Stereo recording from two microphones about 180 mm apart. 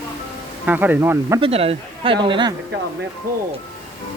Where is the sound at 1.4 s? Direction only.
30° right (ahead or behind).